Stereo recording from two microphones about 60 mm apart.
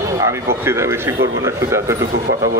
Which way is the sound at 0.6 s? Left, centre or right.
Right.